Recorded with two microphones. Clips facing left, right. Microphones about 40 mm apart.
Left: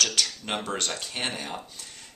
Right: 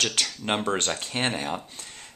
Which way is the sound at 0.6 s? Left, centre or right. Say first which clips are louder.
Right 4 dB; right.